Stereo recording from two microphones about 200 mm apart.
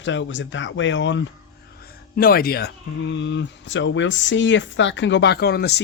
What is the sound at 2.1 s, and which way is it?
Speech, 50° left (ahead or behind).